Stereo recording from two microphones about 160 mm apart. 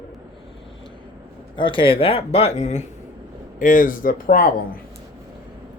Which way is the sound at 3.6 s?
55° left (ahead or behind).